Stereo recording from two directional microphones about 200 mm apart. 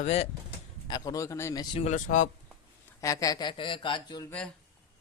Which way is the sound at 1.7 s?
35° left (ahead or behind).